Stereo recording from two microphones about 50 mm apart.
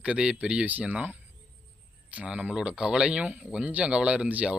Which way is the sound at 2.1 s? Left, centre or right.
Right.